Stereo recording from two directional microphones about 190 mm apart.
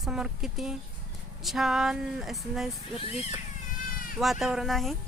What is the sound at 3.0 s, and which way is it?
Speech, 30° left (ahead or behind).